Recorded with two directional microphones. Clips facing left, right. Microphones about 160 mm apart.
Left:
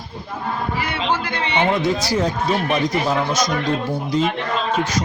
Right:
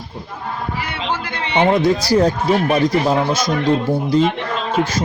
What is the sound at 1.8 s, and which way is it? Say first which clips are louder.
A man's voice: right 5 dB; 35° right (ahead or behind).